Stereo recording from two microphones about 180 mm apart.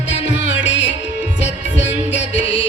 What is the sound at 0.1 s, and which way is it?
Music, 90° left.